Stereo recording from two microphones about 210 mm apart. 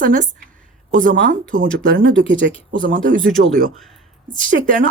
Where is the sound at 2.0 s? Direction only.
65° right (ahead or behind).